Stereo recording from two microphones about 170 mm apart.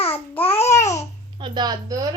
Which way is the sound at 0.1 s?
10° left (ahead or behind).